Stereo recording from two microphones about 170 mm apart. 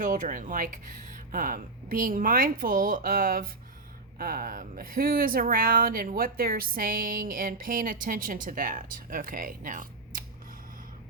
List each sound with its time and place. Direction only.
0.0 s speech: 50° right (ahead or behind)